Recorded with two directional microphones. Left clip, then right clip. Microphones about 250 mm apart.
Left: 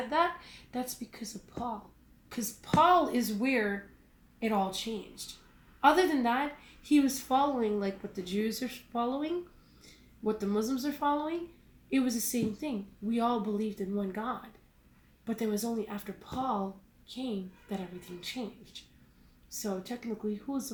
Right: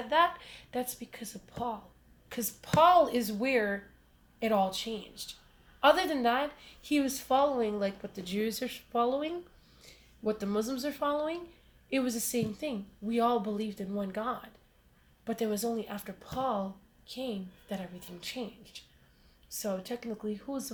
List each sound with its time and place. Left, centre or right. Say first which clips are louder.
0.1 s a woman's voice: right 4 dB; right